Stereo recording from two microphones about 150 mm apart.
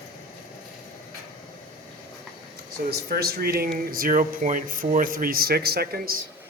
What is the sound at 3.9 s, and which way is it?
Speech, 70° right (ahead or behind).